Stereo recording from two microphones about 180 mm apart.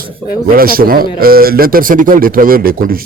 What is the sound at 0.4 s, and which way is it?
A man's voice, 55° right (ahead or behind).